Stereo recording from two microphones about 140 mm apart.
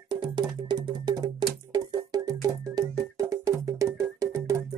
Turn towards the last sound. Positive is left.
turn(degrees=-20)  # may be behind; listen again after turning